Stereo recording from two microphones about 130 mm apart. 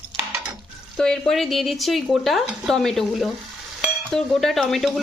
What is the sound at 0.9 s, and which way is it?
Speech, 5° left (ahead or behind).